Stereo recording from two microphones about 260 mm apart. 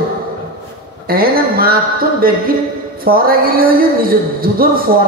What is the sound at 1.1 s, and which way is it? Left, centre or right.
Speech, right.